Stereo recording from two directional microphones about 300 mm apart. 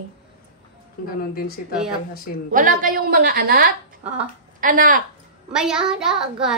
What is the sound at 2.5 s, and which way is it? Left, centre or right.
A woman's voice, right.